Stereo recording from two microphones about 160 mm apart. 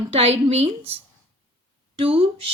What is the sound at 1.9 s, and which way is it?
Speech, 35° right (ahead or behind).